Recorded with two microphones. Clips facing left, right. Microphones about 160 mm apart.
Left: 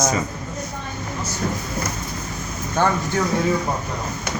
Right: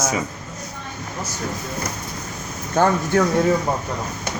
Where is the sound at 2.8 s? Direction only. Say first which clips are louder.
Right 3 dB; 45° right (ahead or behind).